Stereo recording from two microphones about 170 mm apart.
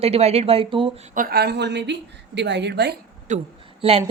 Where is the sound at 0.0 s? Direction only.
35° right (ahead or behind).